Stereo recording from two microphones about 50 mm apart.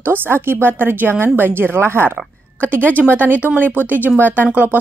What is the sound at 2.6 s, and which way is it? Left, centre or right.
Speech, right.